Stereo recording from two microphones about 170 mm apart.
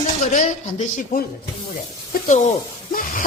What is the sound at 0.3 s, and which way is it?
Speech, 50° left (ahead or behind).